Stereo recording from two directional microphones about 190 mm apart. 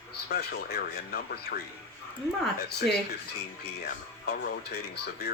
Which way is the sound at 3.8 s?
55° left (ahead or behind).